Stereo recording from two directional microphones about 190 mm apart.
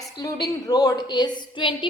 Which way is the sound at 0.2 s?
20° left (ahead or behind).